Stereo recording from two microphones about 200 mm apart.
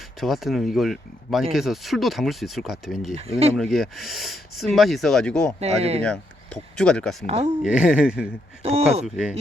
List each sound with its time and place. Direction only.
0.2 s speech: centre (ahead or behind)
3.2 s speech: 30° right (ahead or behind)
3.6 s speech: centre (ahead or behind)
5.5 s speech: 30° right (ahead or behind)
6.0 s speech: 5° left (ahead or behind)
7.3 s speech: 30° right (ahead or behind)
7.6 s speech: 5° right (ahead or behind)
8.6 s speech: 30° right (ahead or behind)
9.0 s speech: centre (ahead or behind)